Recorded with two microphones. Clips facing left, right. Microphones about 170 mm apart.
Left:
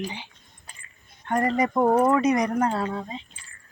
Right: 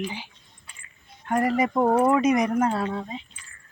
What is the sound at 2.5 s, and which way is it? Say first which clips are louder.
Speech: right 1 dB; 5° right (ahead or behind).